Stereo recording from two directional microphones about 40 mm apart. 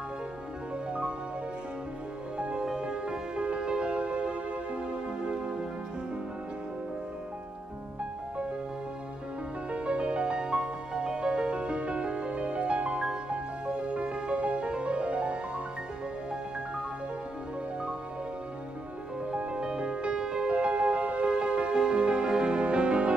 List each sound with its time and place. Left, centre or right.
2.3 s music: right
9.7 s music: right
19.3 s music: right